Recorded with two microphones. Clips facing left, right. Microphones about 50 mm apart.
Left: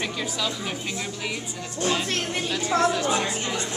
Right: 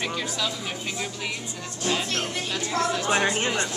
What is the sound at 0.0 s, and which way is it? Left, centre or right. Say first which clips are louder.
Speech: even; centre.